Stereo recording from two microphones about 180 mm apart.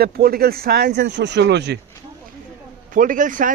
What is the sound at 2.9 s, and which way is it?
Speech, 50° right (ahead or behind).